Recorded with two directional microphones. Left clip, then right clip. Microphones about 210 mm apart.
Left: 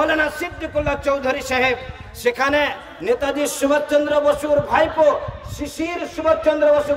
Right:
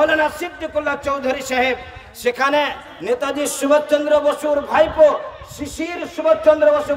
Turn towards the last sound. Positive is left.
turn(degrees=-25)  # may be behind; listen again after turning